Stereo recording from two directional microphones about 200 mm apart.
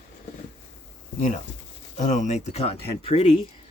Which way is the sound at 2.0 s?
40° left (ahead or behind).